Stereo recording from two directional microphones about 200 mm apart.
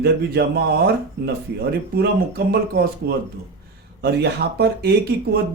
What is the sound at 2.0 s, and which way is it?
Speech, 50° right (ahead or behind).